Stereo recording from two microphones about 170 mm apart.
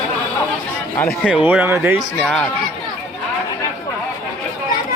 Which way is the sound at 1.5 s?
15° right (ahead or behind).